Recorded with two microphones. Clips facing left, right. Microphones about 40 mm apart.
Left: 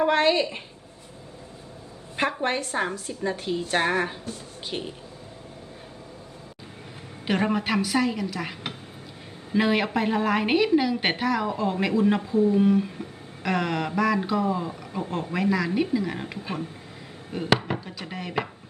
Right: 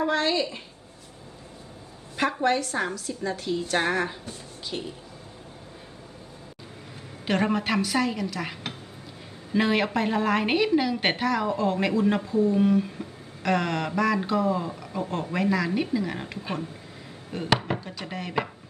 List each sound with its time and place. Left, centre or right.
0.0 s speech: left
2.4 s speech: left
3.8 s speech: centre
4.7 s speech: left
7.3 s a woman's voice: centre